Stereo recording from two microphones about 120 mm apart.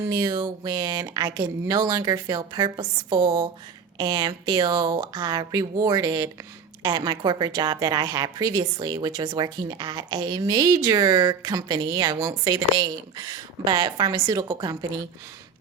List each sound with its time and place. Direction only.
0.1 s a woman's voice: 35° right (ahead or behind)